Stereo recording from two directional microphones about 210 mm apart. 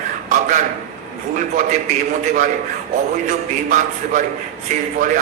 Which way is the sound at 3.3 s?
35° right (ahead or behind).